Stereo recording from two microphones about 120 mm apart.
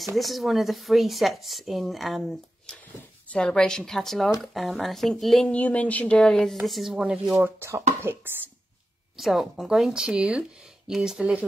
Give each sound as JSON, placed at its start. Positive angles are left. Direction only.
{"t": 0.0, "sound": "speech", "side_deg": 0}
{"t": 7.4, "sound": "speech", "side_deg": -20}
{"t": 9.2, "sound": "speech", "side_deg": 0}